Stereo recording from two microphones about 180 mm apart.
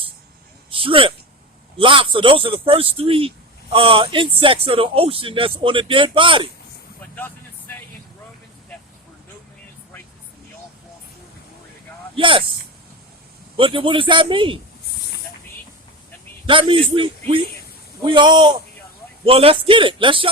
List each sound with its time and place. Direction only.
0.7 s speech: 30° right (ahead or behind)
12.1 s speech: 30° right (ahead or behind)
13.6 s speech: 30° right (ahead or behind)
16.5 s speech: 30° right (ahead or behind)